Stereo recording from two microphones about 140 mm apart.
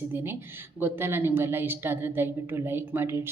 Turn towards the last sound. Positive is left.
turn(degrees=-15)  # may be behind; listen again after turning